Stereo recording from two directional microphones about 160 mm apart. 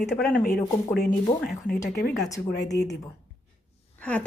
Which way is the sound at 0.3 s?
65° left (ahead or behind).